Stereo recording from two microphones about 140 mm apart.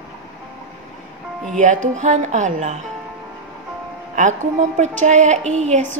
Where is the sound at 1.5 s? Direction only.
60° right (ahead or behind).